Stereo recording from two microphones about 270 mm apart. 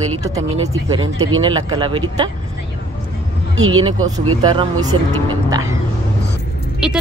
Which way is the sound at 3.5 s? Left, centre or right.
Right.